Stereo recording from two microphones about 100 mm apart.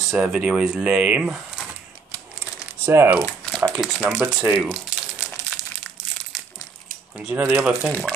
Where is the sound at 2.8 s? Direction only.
25° right (ahead or behind).